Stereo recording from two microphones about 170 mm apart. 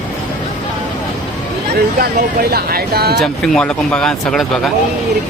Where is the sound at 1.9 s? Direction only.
65° right (ahead or behind).